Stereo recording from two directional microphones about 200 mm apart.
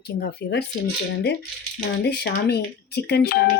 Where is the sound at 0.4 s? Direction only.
50° left (ahead or behind).